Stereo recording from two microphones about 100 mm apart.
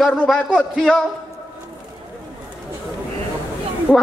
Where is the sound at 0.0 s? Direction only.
15° left (ahead or behind).